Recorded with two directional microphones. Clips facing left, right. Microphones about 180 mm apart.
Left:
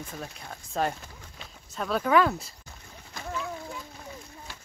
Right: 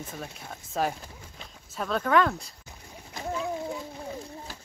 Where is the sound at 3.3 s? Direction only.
30° right (ahead or behind).